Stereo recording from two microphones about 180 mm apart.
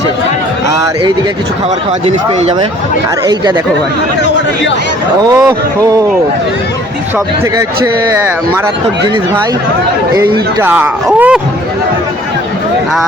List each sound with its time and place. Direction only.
2.0 s speech: 35° right (ahead or behind)
10.6 s speech: 10° right (ahead or behind)